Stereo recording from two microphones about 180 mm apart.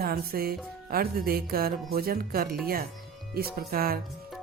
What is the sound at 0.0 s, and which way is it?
Music, 55° right (ahead or behind).